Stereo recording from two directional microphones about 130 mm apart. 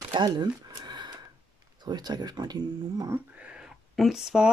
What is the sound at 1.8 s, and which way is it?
Speech, 30° right (ahead or behind).